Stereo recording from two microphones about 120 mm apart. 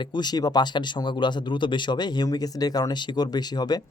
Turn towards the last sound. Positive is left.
turn(degrees=35)  # may be behind; listen again after turning